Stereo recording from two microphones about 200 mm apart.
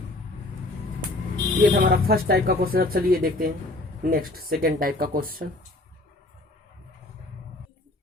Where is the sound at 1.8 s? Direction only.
50° right (ahead or behind).